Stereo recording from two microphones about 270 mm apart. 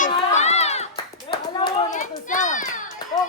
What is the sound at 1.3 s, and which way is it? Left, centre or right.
Children playing, left.